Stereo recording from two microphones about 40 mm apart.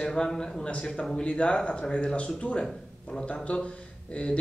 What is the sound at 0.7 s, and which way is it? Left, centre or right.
Speech, left.